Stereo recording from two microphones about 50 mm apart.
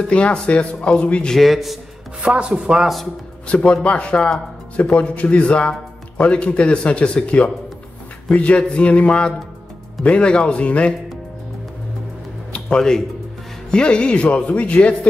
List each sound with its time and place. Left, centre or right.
0.1 s speech: left
1.3 s a man's voice: centre
2.2 s chopping: right
2.8 s a man's voice: centre
3.4 s speech: left
12.6 s speech: centre